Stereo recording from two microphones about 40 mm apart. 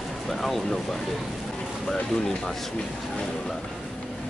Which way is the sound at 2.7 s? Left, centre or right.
Left.